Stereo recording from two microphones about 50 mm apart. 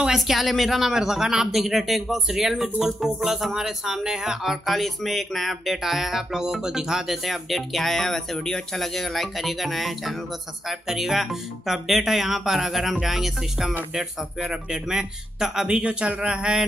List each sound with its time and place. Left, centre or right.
0.0 s speech: centre